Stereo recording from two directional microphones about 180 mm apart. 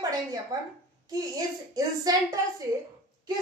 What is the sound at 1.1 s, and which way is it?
Speech, 20° right (ahead or behind).